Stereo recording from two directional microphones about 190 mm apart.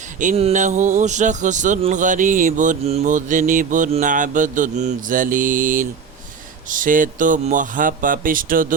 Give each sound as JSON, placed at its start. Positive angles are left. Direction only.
{"t": 0.2, "sound": "speech", "side_deg": -35}